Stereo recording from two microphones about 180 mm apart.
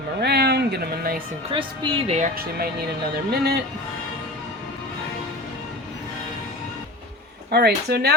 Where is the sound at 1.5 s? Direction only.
30° right (ahead or behind).